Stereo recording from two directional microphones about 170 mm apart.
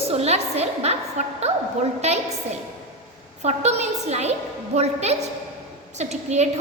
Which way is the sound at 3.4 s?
40° right (ahead or behind).